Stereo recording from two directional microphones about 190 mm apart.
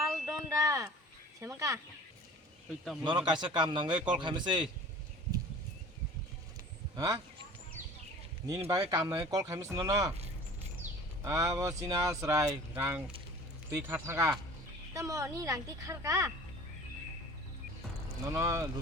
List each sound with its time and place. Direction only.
0.0 s a sound: 15° right (ahead or behind)
1.4 s speech: 15° right (ahead or behind)
3.0 s a man's voice: 25° right (ahead or behind)
6.9 s speech: 20° right (ahead or behind)
7.8 s a sound: 40° right (ahead or behind)
8.4 s speech: 20° right (ahead or behind)
11.2 s speech: 15° right (ahead or behind)
18.3 s speech: 15° right (ahead or behind)